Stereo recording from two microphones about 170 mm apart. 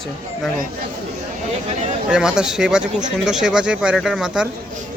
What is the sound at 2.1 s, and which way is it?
Speech, 5° right (ahead or behind).